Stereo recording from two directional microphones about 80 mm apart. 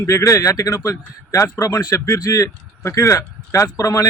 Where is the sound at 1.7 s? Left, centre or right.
Left.